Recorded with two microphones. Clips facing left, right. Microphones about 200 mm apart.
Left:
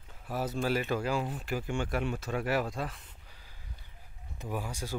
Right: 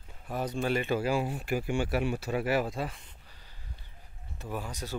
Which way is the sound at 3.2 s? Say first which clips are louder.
Even; 10° left (ahead or behind).